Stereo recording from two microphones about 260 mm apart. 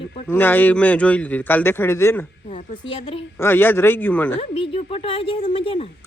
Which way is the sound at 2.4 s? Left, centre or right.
Left.